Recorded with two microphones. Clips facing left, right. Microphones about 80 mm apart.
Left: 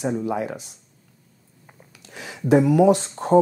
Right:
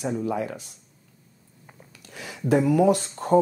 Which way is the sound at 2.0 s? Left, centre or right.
Left.